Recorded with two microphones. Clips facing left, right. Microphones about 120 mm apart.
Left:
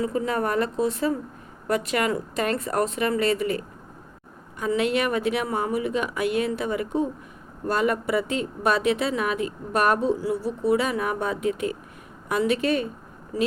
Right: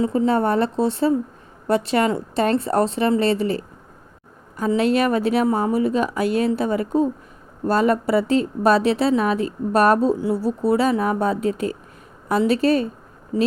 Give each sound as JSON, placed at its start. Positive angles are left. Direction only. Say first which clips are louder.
{"t": 0.0, "sound": "speech", "louder": "right 6 dB", "side_deg": -30}